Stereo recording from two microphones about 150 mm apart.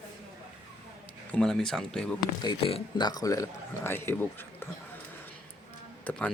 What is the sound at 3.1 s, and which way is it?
A man's voice, 25° left (ahead or behind).